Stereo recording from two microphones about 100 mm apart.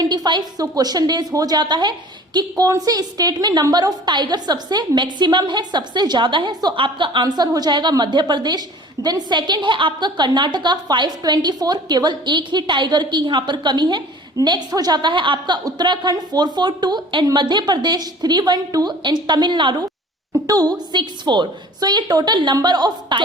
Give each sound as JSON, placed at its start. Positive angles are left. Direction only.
{"t": 0.0, "sound": "a woman's voice", "side_deg": -45}
{"t": 20.5, "sound": "a woman's voice", "side_deg": -40}